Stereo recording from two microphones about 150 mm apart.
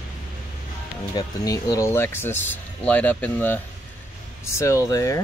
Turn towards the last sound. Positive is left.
turn(degrees=20)  # may be behind; listen again after turning